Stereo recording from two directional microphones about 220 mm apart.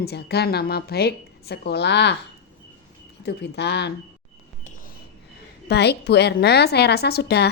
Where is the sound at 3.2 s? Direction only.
50° left (ahead or behind).